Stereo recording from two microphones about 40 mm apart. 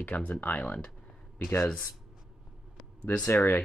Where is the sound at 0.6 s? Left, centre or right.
Left.